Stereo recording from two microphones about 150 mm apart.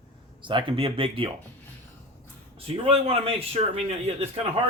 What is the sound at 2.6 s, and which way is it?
A man's voice, 40° right (ahead or behind).